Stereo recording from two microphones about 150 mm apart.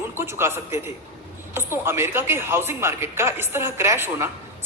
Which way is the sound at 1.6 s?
15° right (ahead or behind).